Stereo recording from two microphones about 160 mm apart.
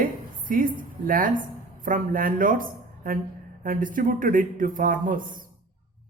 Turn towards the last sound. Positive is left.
turn(degrees=-55)  # may be behind; listen again after turning